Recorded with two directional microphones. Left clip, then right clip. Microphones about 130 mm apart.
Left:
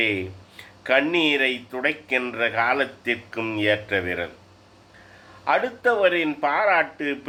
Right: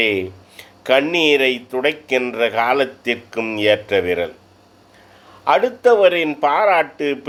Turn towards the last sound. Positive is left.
turn(degrees=-45)  # may be behind; listen again after turning